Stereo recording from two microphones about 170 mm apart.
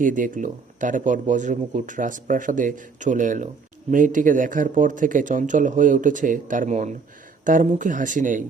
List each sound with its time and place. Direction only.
0.0 s speech: 50° right (ahead or behind)